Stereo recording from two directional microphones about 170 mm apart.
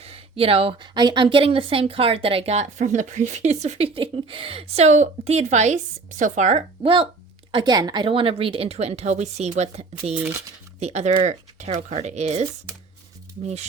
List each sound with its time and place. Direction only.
0.0 s speech: 35° right (ahead or behind)
3.9 s speech: 30° right (ahead or behind)
7.5 s speech: 25° right (ahead or behind); by 12.5 s 40° right (ahead or behind)